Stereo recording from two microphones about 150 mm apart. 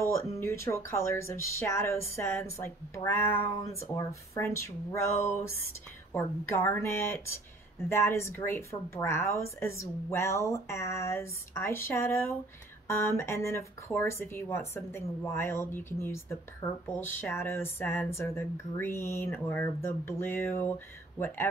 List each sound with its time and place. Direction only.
0.1 s a woman's voice: 20° left (ahead or behind)